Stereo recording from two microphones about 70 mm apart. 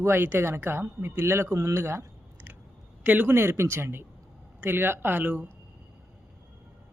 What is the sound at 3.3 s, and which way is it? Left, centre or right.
Speech, right.